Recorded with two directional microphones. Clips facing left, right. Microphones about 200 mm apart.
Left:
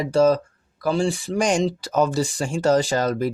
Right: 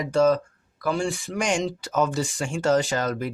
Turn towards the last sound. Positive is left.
turn(degrees=35)  # may be behind; listen again after turning